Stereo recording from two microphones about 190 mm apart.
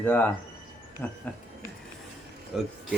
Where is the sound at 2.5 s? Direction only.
Centre (ahead or behind).